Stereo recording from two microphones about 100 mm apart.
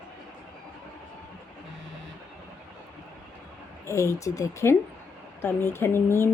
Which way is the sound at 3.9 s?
30° left (ahead or behind).